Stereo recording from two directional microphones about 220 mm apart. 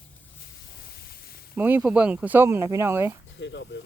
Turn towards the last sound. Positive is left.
turn(degrees=50)  # may be behind; listen again after turning